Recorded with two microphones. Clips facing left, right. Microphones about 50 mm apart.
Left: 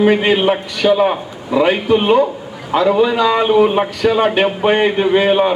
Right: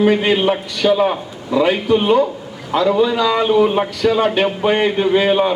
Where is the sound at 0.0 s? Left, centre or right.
Left.